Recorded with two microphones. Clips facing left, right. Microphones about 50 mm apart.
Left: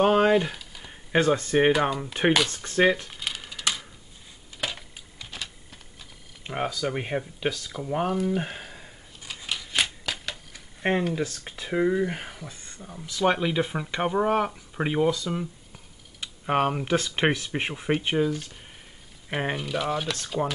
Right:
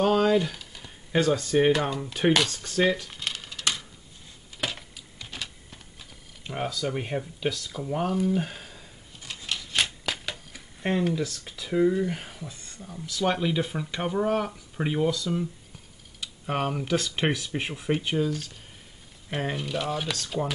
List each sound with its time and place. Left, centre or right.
0.0 s speech: left
1.7 s speech: centre
2.5 s speech: left
3.1 s a sound: centre
6.4 s speech: centre
8.4 s a sound: left
9.2 s scissors: centre
10.0 s shuffling cards: centre
10.8 s speech: left
19.5 s speech: centre